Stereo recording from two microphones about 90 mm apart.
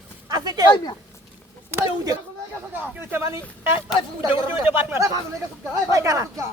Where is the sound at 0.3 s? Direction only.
45° right (ahead or behind).